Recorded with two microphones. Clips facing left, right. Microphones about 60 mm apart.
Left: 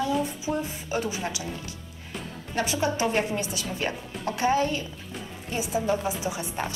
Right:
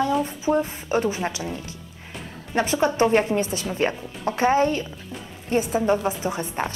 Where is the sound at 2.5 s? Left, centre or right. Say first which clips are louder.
Right 5 dB; right.